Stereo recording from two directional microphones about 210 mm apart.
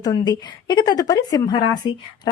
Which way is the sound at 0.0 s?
20° left (ahead or behind).